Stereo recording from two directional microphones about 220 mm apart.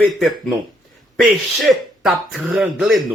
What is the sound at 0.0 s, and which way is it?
Speech, centre (ahead or behind).